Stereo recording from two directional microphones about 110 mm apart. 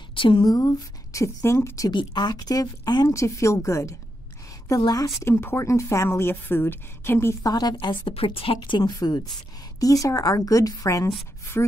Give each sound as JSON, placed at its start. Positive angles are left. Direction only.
{"t": 0.1, "sound": "speech", "side_deg": 50}
{"t": 1.9, "sound": "speech", "side_deg": 40}
{"t": 7.8, "sound": "speech", "side_deg": 45}
{"t": 8.1, "sound": "speech", "side_deg": 55}